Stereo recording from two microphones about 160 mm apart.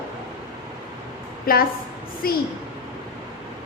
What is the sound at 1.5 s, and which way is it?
Speech, 65° left (ahead or behind).